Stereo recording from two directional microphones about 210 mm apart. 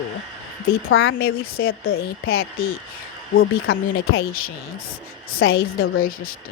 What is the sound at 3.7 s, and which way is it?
Speech, 80° left.